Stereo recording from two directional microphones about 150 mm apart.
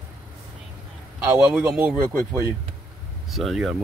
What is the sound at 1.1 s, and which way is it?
Speech, 10° right (ahead or behind).